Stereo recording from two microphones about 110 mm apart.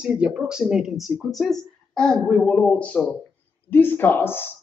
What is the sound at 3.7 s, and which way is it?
Speech, 20° left (ahead or behind).